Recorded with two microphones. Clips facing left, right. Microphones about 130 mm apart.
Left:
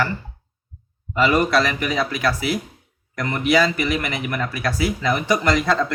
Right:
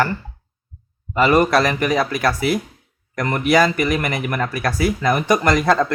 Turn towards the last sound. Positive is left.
turn(degrees=-50)  # may be behind; listen again after turning